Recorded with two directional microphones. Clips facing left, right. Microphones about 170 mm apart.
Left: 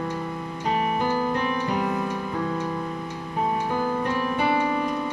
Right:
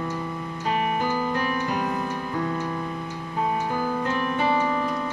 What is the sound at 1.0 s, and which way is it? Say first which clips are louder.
Music: left 1 dB; 20° left (ahead or behind).